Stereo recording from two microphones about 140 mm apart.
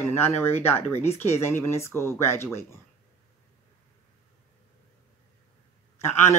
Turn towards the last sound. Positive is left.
turn(degrees=15)  # may be behind; listen again after turning